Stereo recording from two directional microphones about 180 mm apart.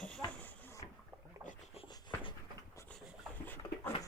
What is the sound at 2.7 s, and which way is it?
Dog, 10° left (ahead or behind).